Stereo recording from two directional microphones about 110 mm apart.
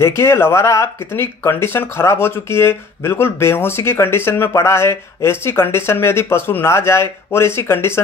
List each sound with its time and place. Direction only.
0.0 s speech: 20° left (ahead or behind)